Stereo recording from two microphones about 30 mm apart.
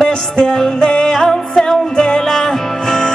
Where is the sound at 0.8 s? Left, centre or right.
Left; by 3.1 s centre.